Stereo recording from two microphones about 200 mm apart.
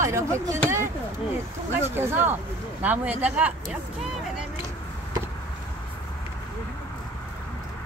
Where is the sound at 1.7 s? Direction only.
10° right (ahead or behind).